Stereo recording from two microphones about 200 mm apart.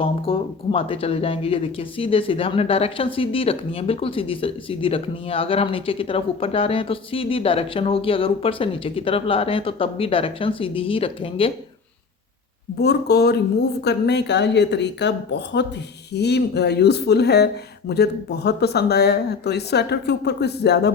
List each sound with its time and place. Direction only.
0.0 s speech: 25° left (ahead or behind)
12.8 s speech: 55° left (ahead or behind)